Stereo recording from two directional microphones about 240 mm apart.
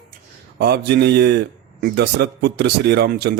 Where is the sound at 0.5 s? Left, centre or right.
Right.